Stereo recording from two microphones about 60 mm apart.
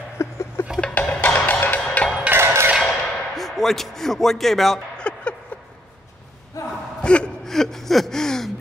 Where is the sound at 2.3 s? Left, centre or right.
Right.